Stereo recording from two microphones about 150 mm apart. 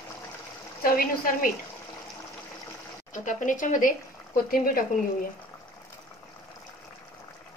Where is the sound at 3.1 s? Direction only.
60° left (ahead or behind).